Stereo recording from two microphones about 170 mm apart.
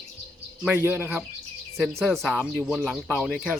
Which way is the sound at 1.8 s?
Centre (ahead or behind).